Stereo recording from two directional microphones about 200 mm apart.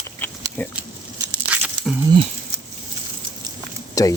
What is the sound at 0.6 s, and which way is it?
Speech, 10° left (ahead or behind).